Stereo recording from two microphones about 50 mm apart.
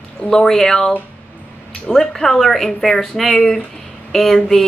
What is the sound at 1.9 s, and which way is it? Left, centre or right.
Speech, centre.